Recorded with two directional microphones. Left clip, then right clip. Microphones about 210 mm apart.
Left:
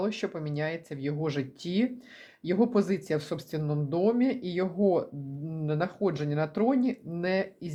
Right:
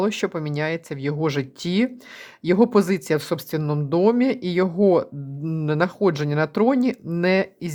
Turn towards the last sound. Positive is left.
turn(degrees=-30)  # may be behind; listen again after turning